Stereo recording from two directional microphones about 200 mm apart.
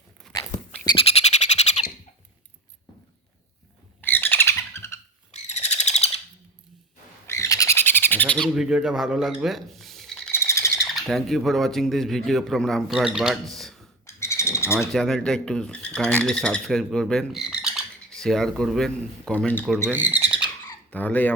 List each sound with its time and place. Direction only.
0.3 s bird: 20° left (ahead or behind)
4.0 s squawk: 10° left (ahead or behind)
5.3 s a sound: 35° left (ahead or behind)
7.3 s bird: 15° left (ahead or behind)
10.3 s bird: 15° left (ahead or behind)
10.9 s speech: centre (ahead or behind)
14.1 s bird: 15° left (ahead or behind)
14.9 s speech: centre (ahead or behind)
19.9 s speech: 10° right (ahead or behind)
20.9 s speech: 10° left (ahead or behind)